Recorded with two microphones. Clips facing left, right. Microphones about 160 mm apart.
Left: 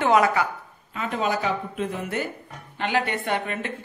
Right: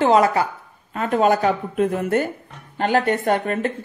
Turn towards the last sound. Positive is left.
turn(degrees=-40)  # may be behind; listen again after turning